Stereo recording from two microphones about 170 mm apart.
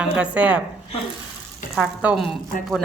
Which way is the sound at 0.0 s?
5° right (ahead or behind).